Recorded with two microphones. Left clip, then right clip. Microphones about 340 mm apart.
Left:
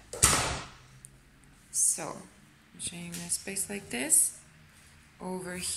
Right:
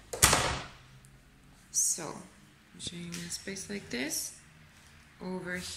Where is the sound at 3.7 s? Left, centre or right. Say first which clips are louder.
Left 3 dB; centre.